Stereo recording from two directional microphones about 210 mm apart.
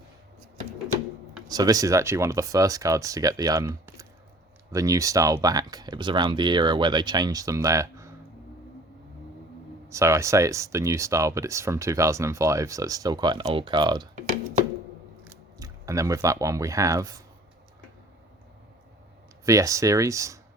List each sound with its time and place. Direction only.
1.5 s speech: 15° right (ahead or behind)
9.9 s speech: 15° right (ahead or behind)
15.3 s speech: 15° right (ahead or behind)
19.5 s speech: 15° right (ahead or behind)